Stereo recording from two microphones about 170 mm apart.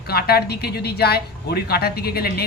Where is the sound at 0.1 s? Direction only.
65° left (ahead or behind).